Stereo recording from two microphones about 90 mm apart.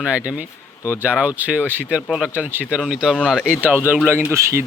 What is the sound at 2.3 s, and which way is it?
Speech, 20° right (ahead or behind).